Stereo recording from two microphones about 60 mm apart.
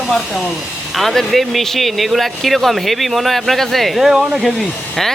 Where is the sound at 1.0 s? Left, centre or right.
Centre.